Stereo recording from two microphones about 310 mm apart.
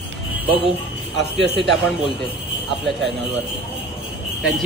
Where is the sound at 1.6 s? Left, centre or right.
Centre.